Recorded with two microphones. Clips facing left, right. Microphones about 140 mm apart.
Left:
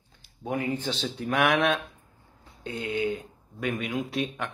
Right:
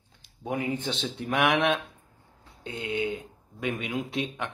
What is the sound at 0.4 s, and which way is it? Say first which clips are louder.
Speech: left 1 dB; 20° right (ahead or behind).